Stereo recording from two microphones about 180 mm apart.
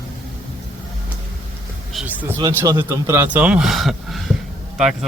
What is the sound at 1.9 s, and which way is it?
Speech, 10° right (ahead or behind).